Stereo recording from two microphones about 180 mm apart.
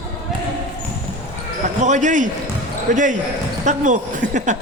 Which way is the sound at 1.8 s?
45° right (ahead or behind).